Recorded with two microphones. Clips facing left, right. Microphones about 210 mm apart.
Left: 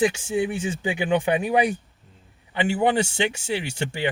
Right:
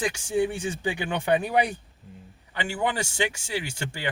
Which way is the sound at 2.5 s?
20° left (ahead or behind).